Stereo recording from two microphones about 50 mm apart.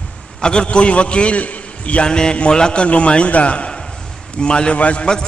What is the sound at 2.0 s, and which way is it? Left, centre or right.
A man's voice, centre.